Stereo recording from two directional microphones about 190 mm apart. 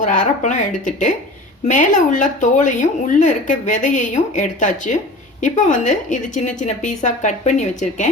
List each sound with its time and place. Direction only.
0.0 s a woman's voice: 40° left (ahead or behind)